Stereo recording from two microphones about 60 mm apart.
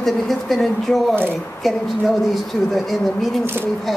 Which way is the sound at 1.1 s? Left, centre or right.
Right.